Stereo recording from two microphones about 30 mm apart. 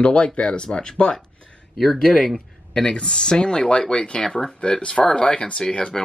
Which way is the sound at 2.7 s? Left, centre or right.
Left.